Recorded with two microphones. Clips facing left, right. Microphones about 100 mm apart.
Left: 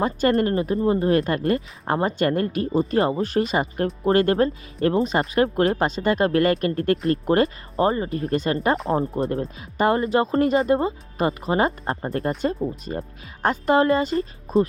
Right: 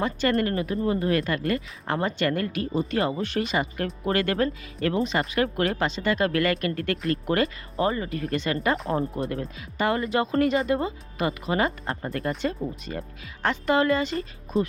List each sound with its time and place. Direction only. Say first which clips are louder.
0.0 s speech: left 4 dB; 35° left (ahead or behind)